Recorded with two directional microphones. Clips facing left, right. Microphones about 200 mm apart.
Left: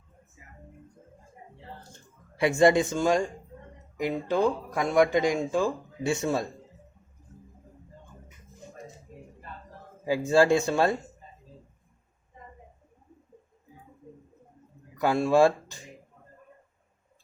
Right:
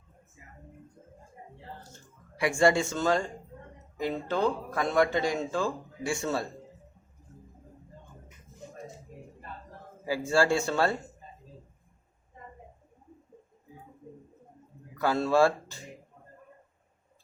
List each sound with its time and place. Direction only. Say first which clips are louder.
2.3 s speech: left 3 dB; 25° left (ahead or behind)
10.1 s speech: left 4 dB; 20° left (ahead or behind)
14.9 s speech: left 3 dB; 15° left (ahead or behind)